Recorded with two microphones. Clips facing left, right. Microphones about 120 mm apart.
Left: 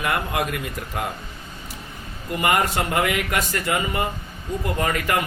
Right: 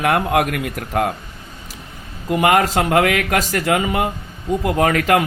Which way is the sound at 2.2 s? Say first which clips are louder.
Right 6 dB; 90° right.